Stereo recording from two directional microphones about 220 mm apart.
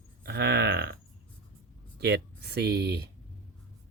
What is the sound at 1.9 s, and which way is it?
Speech, 50° right (ahead or behind).